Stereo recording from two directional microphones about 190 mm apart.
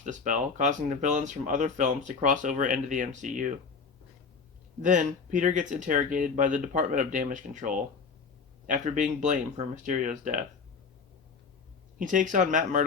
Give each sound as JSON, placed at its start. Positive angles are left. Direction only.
{"t": 0.0, "sound": "speech", "side_deg": -40}
{"t": 4.8, "sound": "speech", "side_deg": -40}
{"t": 11.9, "sound": "speech", "side_deg": -45}